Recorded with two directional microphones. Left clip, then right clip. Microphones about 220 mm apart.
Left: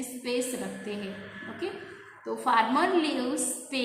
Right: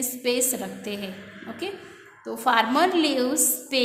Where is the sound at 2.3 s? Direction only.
40° right (ahead or behind).